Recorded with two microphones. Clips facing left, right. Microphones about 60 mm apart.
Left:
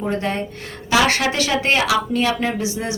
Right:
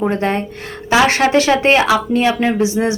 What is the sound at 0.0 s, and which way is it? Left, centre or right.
Speech, right.